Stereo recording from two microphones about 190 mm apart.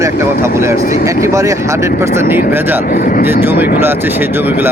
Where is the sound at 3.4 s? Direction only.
10° right (ahead or behind).